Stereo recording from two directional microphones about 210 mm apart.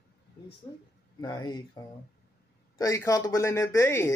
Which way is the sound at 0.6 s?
25° left (ahead or behind).